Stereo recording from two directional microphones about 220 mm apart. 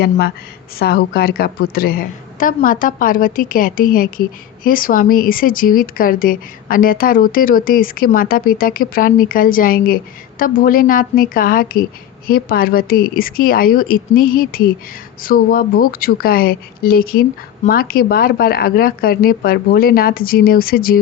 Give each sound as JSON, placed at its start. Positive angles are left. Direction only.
{"t": 0.8, "sound": "a woman's voice", "side_deg": 45}